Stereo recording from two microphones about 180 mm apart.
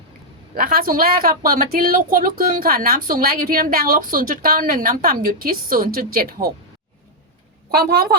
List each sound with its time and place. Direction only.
0.5 s a woman's voice: 55° right (ahead or behind)
7.7 s a woman's voice: 60° right (ahead or behind)